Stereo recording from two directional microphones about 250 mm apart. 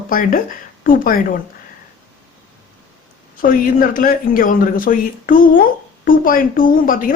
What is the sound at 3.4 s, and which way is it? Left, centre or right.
Speech, left.